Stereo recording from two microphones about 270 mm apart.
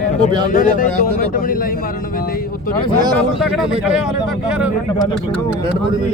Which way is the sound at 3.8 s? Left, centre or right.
Centre.